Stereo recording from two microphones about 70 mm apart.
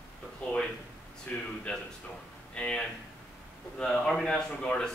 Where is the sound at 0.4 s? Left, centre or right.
Centre.